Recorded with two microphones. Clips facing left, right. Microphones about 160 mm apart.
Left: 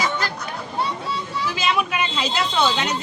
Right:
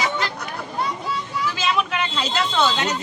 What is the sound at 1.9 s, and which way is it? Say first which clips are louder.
Speech: even; 15° left (ahead or behind).